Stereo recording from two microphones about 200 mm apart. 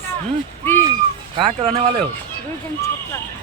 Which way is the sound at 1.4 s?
30° right (ahead or behind).